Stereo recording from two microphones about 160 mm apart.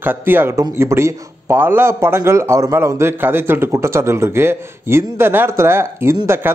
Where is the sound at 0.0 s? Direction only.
15° right (ahead or behind).